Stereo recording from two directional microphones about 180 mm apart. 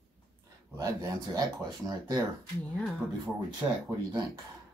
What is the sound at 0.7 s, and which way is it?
Speech, 20° right (ahead or behind).